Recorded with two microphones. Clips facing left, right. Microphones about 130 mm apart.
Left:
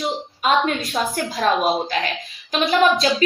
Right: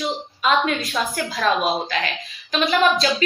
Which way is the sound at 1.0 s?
30° left (ahead or behind).